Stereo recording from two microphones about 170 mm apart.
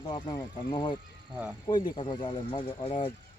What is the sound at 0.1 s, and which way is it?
Speech, 25° left (ahead or behind).